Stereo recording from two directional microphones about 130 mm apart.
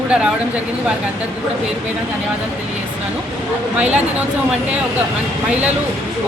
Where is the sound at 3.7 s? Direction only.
10° right (ahead or behind).